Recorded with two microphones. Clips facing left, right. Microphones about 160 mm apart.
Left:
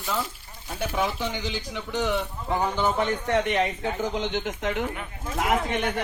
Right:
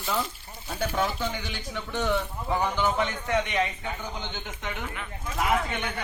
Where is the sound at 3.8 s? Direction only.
90° left.